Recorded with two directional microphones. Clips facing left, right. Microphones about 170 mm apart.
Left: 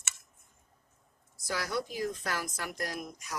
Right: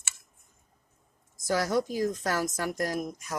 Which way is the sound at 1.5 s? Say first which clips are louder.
Right 7 dB; 45° right (ahead or behind).